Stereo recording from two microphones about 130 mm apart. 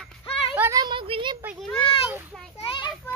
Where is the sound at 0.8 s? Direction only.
40° right (ahead or behind).